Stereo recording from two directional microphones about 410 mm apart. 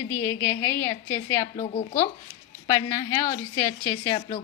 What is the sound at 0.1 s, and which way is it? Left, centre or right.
A woman's voice, centre.